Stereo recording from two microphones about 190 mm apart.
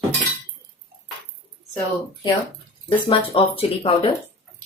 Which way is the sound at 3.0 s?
30° left (ahead or behind).